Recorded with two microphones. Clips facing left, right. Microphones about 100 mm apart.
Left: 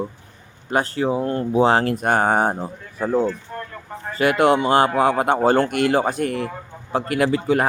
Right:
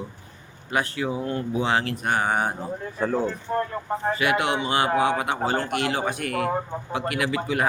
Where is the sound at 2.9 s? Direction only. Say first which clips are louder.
Left 4 dB; 10° left (ahead or behind).